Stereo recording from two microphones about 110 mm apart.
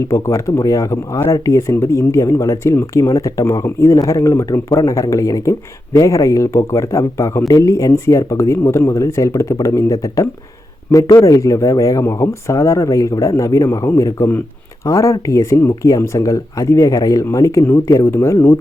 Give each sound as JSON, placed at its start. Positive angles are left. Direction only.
{"t": 0.1, "sound": "speech", "side_deg": 30}